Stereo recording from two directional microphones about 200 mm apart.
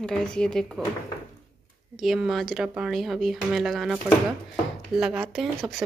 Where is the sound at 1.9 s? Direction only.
Centre (ahead or behind).